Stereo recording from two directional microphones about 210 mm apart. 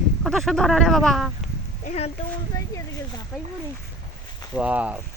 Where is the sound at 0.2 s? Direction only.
Centre (ahead or behind).